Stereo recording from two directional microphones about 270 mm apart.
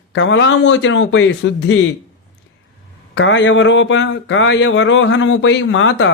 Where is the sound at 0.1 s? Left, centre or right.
Left.